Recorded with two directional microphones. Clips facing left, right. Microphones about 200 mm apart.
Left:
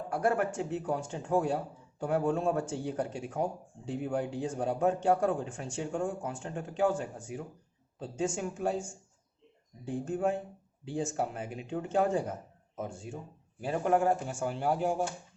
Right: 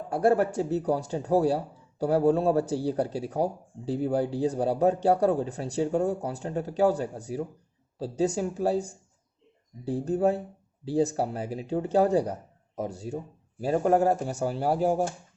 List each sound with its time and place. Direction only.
0.1 s speech: 30° right (ahead or behind)